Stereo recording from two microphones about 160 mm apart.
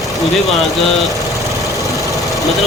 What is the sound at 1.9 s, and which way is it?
Engine, 20° right (ahead or behind).